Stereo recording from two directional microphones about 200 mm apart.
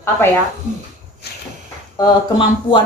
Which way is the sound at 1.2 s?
55° left (ahead or behind).